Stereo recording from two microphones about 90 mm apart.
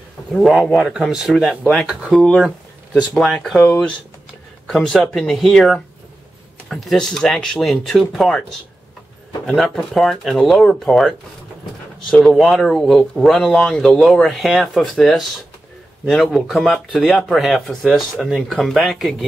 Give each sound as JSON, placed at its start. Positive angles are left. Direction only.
{"t": 0.3, "sound": "speech", "side_deg": 0}
{"t": 2.0, "sound": "speech", "side_deg": 5}
{"t": 2.4, "sound": "speech", "side_deg": -5}
{"t": 3.5, "sound": "speech", "side_deg": 20}
{"t": 4.6, "sound": "speech", "side_deg": 5}
{"t": 9.6, "sound": "speech", "side_deg": 0}